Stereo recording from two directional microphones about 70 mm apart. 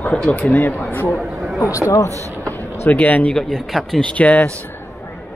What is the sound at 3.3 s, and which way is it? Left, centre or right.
Speech, centre.